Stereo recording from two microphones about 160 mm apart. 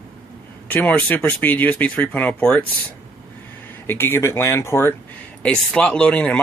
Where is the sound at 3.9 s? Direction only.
15° left (ahead or behind).